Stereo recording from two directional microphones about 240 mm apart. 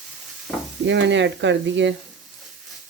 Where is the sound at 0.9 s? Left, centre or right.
Right.